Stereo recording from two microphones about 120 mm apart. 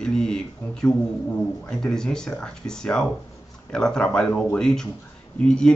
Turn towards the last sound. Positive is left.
turn(degrees=5)  # may be behind; listen again after turning